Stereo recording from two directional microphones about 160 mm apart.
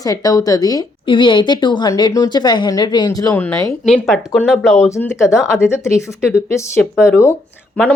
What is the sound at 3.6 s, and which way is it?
Speech, centre (ahead or behind).